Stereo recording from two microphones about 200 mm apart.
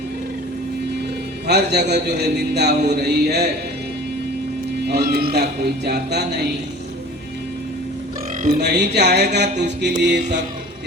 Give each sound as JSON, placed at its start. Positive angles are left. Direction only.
{"t": 1.5, "sound": "a man's voice", "side_deg": -55}
{"t": 4.9, "sound": "speech", "side_deg": -50}
{"t": 8.4, "sound": "speech", "side_deg": -40}
{"t": 8.6, "sound": "a man's voice", "side_deg": -55}